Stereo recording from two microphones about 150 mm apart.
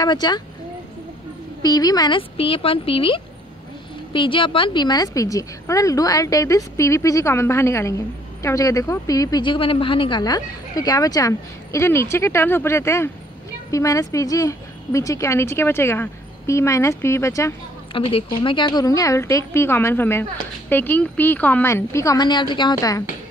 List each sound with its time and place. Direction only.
0.0 s speech: 30° left (ahead or behind)
1.6 s speech: 25° left (ahead or behind)
17.9 s speech: 35° left (ahead or behind)